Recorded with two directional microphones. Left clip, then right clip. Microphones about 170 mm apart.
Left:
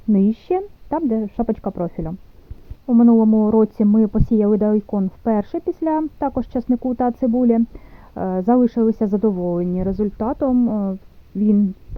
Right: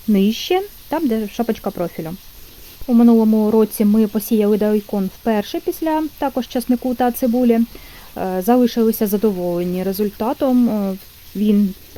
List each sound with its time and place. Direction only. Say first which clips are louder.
0.1 s speech: right 2 dB; 10° right (ahead or behind)
5.4 s speech: right 1 dB; 5° right (ahead or behind); by 10.5 s 25° right (ahead or behind)
10.5 s speech: right 2 dB; 35° right (ahead or behind)